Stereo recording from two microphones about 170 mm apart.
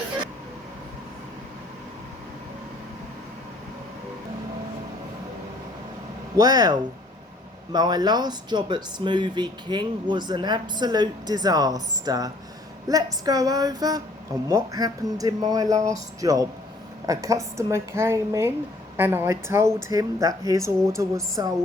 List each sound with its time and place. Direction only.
6.3 s a woman's voice: 25° right (ahead or behind)